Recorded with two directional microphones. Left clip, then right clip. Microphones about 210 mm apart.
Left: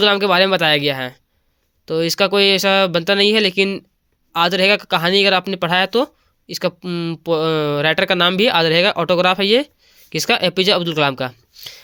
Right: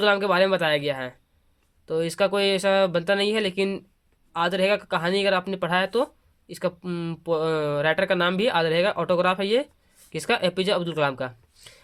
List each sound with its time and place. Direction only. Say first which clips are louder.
0.0 s speech: left 6 dB; 40° left (ahead or behind)